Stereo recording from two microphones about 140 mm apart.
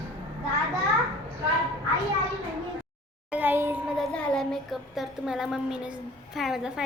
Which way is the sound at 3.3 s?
15° right (ahead or behind).